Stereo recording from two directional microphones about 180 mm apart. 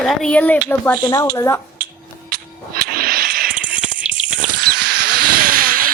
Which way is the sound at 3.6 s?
5° right (ahead or behind).